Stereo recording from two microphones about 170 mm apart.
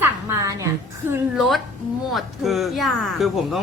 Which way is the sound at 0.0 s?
15° right (ahead or behind).